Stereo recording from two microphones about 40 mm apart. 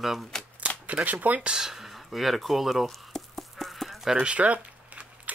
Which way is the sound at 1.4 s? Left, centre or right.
Right.